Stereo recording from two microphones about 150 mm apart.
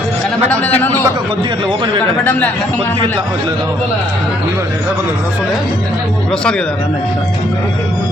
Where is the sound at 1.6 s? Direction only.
35° right (ahead or behind).